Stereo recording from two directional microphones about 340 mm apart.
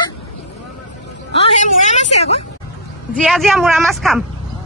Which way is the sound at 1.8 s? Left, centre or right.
Centre.